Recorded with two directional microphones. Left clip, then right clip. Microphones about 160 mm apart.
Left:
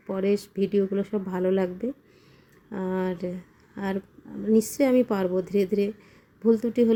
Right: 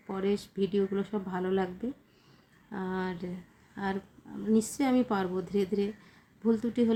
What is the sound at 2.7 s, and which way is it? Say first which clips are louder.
Speech: left 6 dB; 20° left (ahead or behind).